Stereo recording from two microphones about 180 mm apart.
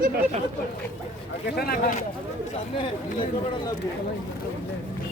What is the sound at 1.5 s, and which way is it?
Speech, 60° left (ahead or behind).